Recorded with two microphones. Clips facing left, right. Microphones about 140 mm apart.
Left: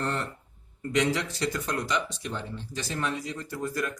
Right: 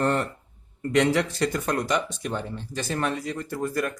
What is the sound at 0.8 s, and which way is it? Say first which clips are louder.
Speech: right 5 dB; 60° right (ahead or behind).